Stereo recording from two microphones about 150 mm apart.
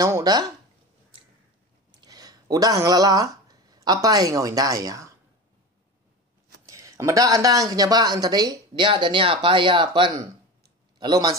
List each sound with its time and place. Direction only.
0.0 s speech: 25° right (ahead or behind)
1.9 s speech: 25° right (ahead or behind)
6.6 s speech: 20° right (ahead or behind)